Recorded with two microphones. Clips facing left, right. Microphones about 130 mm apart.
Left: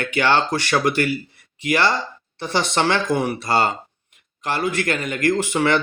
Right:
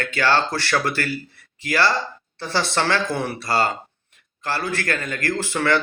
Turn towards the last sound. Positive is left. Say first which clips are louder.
# left 3 dB
turn(degrees=15)  # may be behind; listen again after turning